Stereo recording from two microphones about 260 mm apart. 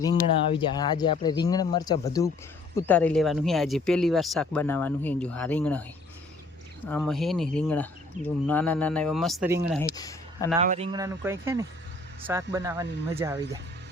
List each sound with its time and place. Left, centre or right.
0.0 s speech: centre
6.8 s speech: centre
9.9 s a sound: centre
10.6 s speech: right